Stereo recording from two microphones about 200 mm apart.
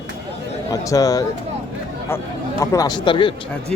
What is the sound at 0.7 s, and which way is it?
Speech, 15° left (ahead or behind).